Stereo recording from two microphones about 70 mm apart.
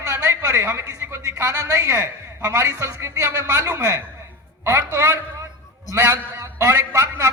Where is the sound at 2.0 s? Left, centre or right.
Right.